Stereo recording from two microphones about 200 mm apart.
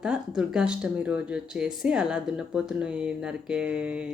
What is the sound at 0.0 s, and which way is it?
Speech, 5° right (ahead or behind).